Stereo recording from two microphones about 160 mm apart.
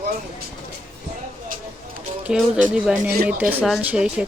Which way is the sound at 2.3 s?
5° right (ahead or behind).